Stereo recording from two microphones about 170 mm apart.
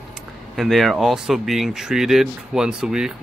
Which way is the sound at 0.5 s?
Centre (ahead or behind).